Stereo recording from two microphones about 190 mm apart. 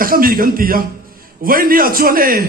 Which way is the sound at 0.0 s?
50° right (ahead or behind).